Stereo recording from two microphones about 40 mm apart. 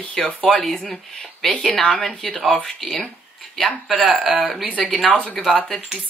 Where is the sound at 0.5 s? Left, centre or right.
Centre.